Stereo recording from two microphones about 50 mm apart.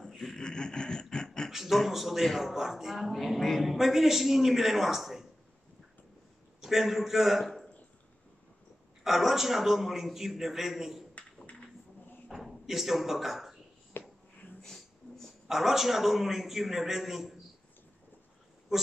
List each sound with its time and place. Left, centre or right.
0.0 s a sound: centre
1.5 s a man's voice: centre
6.6 s a man's voice: centre
9.0 s a man's voice: centre
12.3 s speech: centre
13.9 s a sound: left
14.6 s a sound: centre
15.4 s a man's voice: centre
18.7 s speech: centre